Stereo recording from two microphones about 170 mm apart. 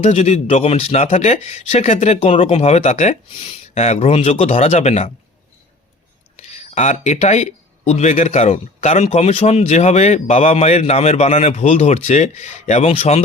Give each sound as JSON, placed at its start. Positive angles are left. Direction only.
{"t": 0.0, "sound": "speech", "side_deg": 40}
{"t": 6.3, "sound": "speech", "side_deg": 40}